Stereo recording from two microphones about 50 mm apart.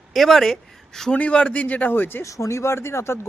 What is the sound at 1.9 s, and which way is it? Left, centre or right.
Speech, left.